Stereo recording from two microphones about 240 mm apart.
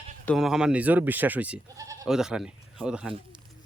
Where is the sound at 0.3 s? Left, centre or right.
Centre.